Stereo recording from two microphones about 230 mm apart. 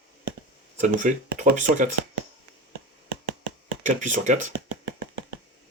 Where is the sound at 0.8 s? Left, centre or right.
Right.